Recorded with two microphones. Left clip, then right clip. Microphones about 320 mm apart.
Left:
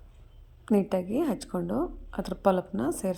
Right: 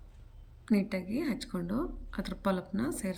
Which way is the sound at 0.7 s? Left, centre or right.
Left.